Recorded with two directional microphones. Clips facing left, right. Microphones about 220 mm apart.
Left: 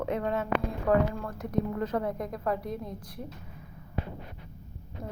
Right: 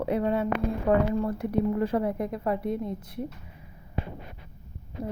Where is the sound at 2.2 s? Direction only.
5° right (ahead or behind).